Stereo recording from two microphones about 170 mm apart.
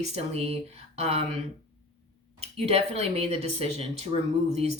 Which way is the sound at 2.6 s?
35° right (ahead or behind).